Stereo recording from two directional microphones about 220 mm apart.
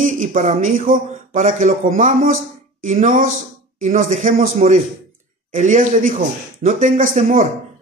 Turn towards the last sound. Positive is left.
turn(degrees=-35)  # may be behind; listen again after turning